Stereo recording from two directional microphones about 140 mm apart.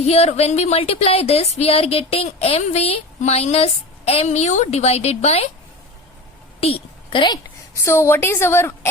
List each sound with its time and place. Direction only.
0.0 s speech: 50° left (ahead or behind)
6.6 s a sound: 40° left (ahead or behind)
7.9 s a woman's voice: 20° left (ahead or behind)